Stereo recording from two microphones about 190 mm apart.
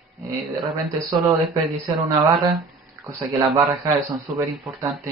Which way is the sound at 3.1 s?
15° right (ahead or behind).